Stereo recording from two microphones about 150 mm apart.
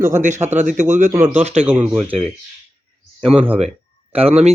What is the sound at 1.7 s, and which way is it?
Speech, 10° right (ahead or behind).